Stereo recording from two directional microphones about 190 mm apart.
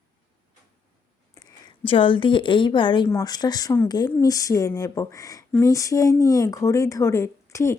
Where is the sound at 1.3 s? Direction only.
20° left (ahead or behind).